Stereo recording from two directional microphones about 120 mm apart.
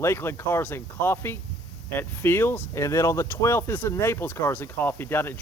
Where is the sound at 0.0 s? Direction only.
20° left (ahead or behind).